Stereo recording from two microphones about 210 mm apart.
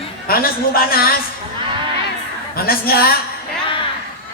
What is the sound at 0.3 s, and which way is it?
Speech, 45° left (ahead or behind).